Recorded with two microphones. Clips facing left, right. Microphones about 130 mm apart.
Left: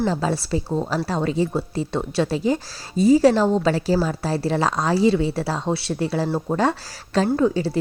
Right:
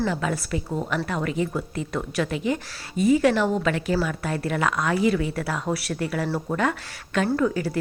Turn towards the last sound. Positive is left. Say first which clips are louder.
# left 3 dB
turn(degrees=25)  # may be behind; listen again after turning